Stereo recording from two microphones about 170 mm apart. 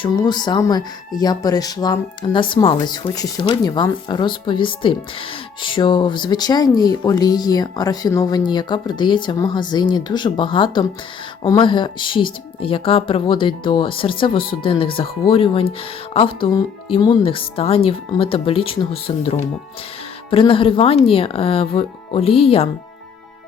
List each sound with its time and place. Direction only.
0.0 s speech: 25° left (ahead or behind)